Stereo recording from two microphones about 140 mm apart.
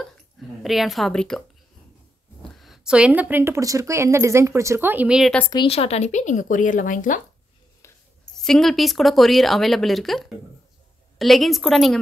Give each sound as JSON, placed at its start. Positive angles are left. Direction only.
{"t": 0.6, "sound": "speech", "side_deg": 0}
{"t": 2.6, "sound": "a woman's voice", "side_deg": -5}
{"t": 5.7, "sound": "speech", "side_deg": 45}
{"t": 8.4, "sound": "speech", "side_deg": 5}